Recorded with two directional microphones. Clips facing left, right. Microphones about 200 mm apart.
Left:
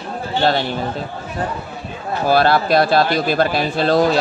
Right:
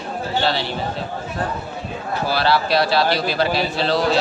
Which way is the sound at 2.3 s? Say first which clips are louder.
Left 5 dB; 50° left (ahead or behind).